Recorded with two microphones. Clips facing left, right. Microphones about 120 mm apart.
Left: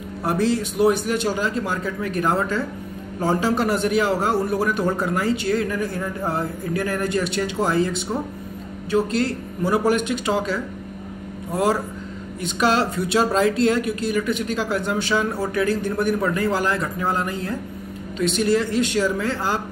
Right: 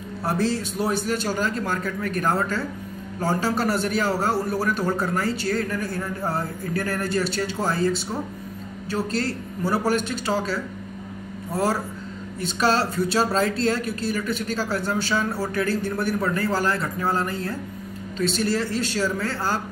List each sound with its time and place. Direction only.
0.2 s a man's voice: 15° left (ahead or behind)